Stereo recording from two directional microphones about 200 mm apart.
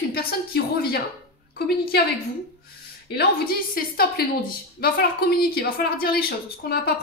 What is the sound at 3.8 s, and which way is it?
Speech, 45° left (ahead or behind).